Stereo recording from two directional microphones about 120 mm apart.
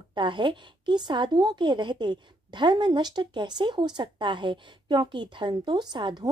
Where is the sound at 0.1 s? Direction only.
40° right (ahead or behind).